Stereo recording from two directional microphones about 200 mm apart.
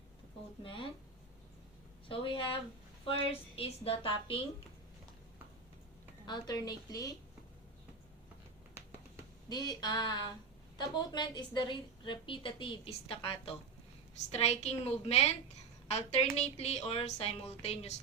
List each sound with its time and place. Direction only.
0.6 s a woman's voice: 25° left (ahead or behind)
2.0 s a woman's voice: 25° left (ahead or behind)
6.2 s a woman's voice: 20° left (ahead or behind)
8.8 s finger snapping: 10° right (ahead or behind)
9.5 s a woman's voice: 20° left (ahead or behind)